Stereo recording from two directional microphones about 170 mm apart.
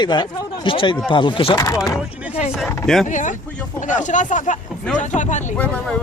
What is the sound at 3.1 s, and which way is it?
Speech, 45° left (ahead or behind).